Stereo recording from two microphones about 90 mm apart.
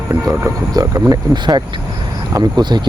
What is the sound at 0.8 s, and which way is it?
Speech, 45° right (ahead or behind).